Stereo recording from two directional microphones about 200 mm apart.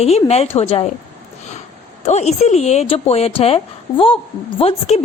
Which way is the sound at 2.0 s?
35° left (ahead or behind).